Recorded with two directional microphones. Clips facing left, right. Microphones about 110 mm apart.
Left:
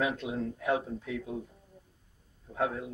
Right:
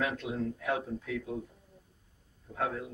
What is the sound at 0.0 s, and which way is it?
Speech, 15° left (ahead or behind).